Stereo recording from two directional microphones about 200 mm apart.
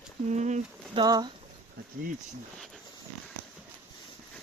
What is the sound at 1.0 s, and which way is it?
Speech, 20° right (ahead or behind).